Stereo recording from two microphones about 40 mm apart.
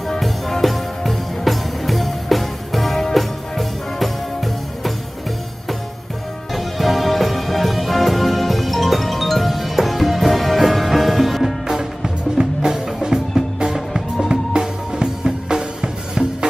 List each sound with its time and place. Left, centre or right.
0.2 s music: centre
6.5 s music: centre
11.6 s music: centre
14.3 s music: centre